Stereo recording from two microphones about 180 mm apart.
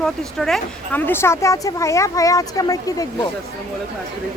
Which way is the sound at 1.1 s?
15° left (ahead or behind).